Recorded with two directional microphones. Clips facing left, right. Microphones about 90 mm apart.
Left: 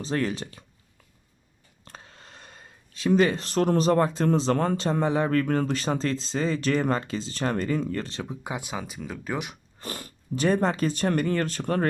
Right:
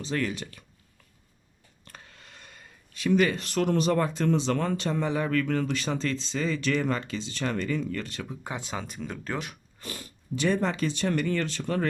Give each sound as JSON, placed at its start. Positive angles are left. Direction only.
{"t": 0.0, "sound": "speech", "side_deg": 35}
{"t": 1.8, "sound": "speech", "side_deg": 30}
{"t": 8.4, "sound": "speech", "side_deg": 15}
{"t": 9.8, "sound": "speech", "side_deg": 45}